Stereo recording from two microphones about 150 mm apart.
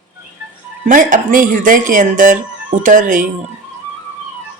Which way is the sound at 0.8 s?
60° right (ahead or behind).